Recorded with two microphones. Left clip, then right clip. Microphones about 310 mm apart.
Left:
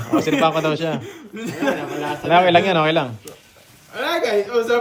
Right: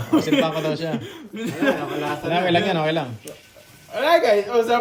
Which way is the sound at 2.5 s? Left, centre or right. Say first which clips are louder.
Left 5 dB; centre.